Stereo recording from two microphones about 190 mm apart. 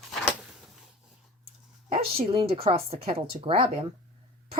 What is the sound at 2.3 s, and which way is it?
Speech, 30° right (ahead or behind).